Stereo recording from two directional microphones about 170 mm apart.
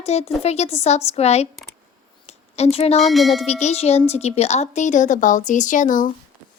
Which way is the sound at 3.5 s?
40° left (ahead or behind).